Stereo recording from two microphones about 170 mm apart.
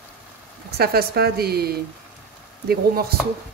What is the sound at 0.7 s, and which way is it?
Speech, 70° right (ahead or behind).